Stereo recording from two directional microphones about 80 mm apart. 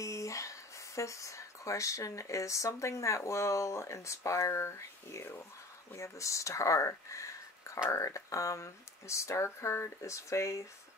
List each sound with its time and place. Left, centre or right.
0.0 s speech: left